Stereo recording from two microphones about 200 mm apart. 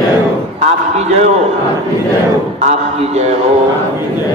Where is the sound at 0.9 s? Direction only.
35° right (ahead or behind).